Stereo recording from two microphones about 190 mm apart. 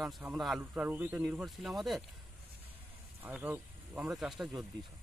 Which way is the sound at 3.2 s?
10° right (ahead or behind).